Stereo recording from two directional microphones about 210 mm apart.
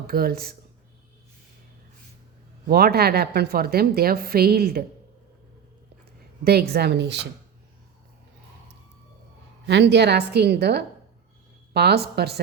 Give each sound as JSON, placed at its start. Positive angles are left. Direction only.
{"t": 0.1, "sound": "a woman's voice", "side_deg": -45}
{"t": 2.6, "sound": "a woman's voice", "side_deg": -45}
{"t": 6.4, "sound": "a woman's voice", "side_deg": -50}
{"t": 9.6, "sound": "a woman's voice", "side_deg": -55}